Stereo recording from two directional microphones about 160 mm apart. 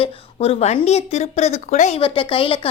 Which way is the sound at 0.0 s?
35° left (ahead or behind).